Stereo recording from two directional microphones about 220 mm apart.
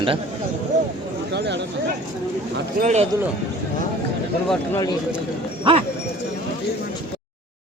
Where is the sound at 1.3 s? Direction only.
50° right (ahead or behind).